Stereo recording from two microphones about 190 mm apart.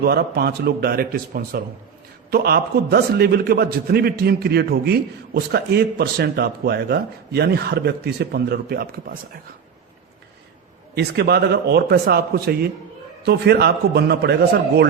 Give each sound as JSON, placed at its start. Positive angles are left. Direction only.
{"t": 0.0, "sound": "a man's voice", "side_deg": -55}
{"t": 10.9, "sound": "a man's voice", "side_deg": -55}